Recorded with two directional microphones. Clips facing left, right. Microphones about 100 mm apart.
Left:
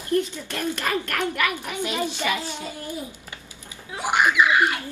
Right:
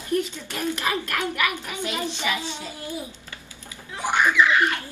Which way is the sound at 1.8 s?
15° left (ahead or behind).